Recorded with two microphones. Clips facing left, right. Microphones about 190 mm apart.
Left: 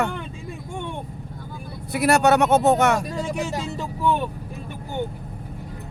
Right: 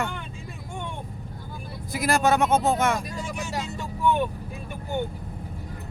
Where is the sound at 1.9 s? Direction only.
70° left (ahead or behind).